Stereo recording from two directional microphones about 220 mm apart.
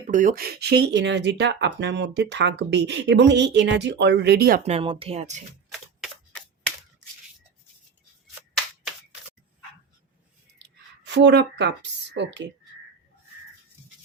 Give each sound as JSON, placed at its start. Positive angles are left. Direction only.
{"t": 0.1, "sound": "speech", "side_deg": -35}
{"t": 4.6, "sound": "speech", "side_deg": -25}
{"t": 6.0, "sound": "a sound", "side_deg": 5}
{"t": 10.6, "sound": "a woman's voice", "side_deg": -50}